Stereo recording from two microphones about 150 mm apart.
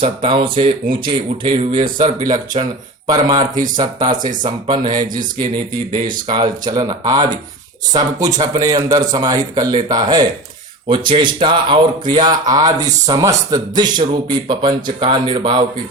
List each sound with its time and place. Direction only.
0.0 s a man's voice: 35° right (ahead or behind)